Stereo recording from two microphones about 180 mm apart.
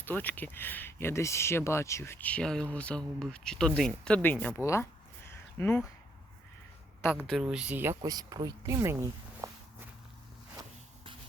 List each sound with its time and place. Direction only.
0.0 s speech: 10° left (ahead or behind)
5.3 s a sound: 10° left (ahead or behind)
7.2 s speech: 5° right (ahead or behind)